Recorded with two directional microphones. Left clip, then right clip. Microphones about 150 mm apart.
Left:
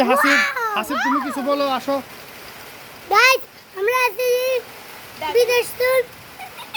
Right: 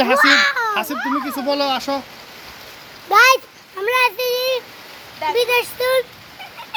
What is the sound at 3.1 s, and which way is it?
A child's voice, 5° left (ahead or behind).